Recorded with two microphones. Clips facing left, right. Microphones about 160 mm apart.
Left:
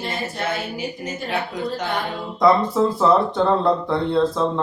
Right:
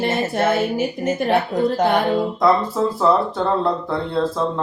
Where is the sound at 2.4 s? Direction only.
Centre (ahead or behind).